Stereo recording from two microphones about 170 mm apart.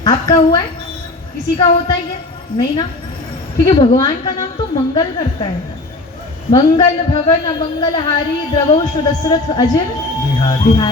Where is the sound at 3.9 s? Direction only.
20° left (ahead or behind).